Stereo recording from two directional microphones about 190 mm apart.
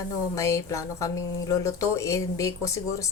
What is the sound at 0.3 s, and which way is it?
Speech, 15° left (ahead or behind).